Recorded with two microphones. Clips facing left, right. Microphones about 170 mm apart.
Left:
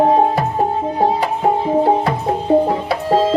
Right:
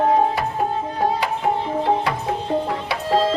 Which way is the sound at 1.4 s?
40° left (ahead or behind).